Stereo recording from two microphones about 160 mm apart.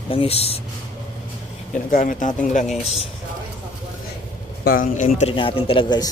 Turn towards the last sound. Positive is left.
turn(degrees=25)  # may be behind; listen again after turning